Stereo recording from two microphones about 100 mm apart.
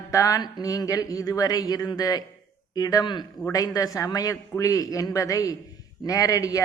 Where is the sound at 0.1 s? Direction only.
35° left (ahead or behind).